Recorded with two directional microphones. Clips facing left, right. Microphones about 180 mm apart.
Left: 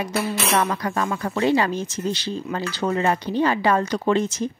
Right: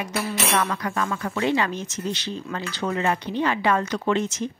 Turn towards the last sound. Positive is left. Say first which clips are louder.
# left 3 dB
turn(degrees=35)  # may be behind; listen again after turning